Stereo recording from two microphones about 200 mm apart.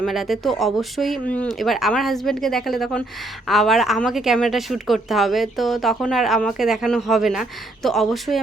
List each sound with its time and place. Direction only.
0.0 s a woman's voice: centre (ahead or behind)